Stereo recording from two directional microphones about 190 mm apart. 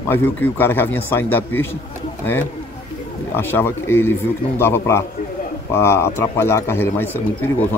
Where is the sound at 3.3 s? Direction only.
10° left (ahead or behind).